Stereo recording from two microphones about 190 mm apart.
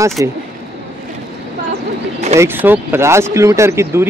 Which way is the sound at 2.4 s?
10° right (ahead or behind).